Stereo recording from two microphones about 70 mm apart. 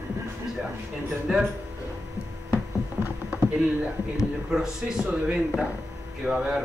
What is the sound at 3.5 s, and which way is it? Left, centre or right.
A man's voice, centre.